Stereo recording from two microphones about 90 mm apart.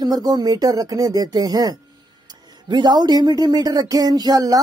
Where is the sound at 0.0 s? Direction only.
45° right (ahead or behind).